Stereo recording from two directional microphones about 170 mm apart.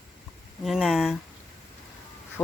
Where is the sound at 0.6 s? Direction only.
Centre (ahead or behind).